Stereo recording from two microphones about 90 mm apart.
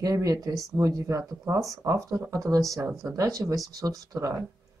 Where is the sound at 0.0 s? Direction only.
40° right (ahead or behind).